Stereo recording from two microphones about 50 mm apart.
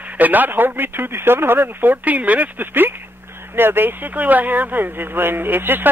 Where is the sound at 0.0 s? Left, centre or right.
Right.